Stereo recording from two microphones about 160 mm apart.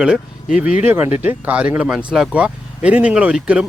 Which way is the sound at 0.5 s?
5° right (ahead or behind).